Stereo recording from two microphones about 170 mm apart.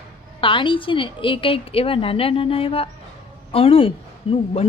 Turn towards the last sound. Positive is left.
turn(degrees=30)  # may be behind; listen again after turning